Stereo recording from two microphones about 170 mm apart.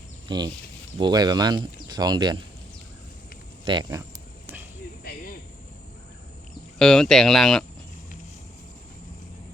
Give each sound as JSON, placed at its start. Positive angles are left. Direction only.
{"t": 0.3, "sound": "speech", "side_deg": -25}
{"t": 3.7, "sound": "speech", "side_deg": -25}
{"t": 6.7, "sound": "speech", "side_deg": 5}